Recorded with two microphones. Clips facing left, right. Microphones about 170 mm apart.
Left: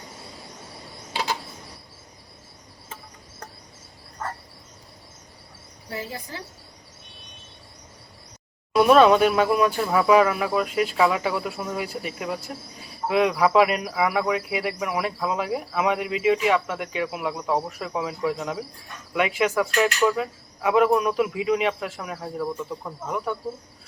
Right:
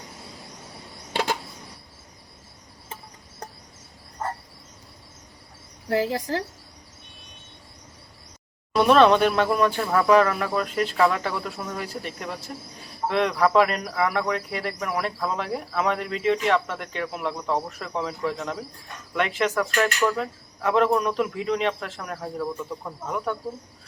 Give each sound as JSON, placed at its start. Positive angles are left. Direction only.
{"t": 1.1, "sound": "a sound", "side_deg": -50}
{"t": 5.9, "sound": "speech", "side_deg": -90}
{"t": 8.7, "sound": "speech", "side_deg": 5}